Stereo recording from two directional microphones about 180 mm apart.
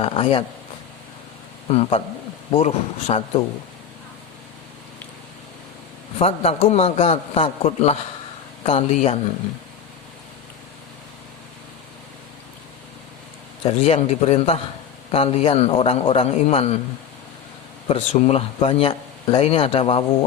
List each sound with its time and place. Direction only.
0.0 s speech: 30° left (ahead or behind)
1.7 s speech: 35° left (ahead or behind)
6.1 s speech: 35° left (ahead or behind)
13.7 s speech: 35° left (ahead or behind)
17.8 s speech: 35° left (ahead or behind)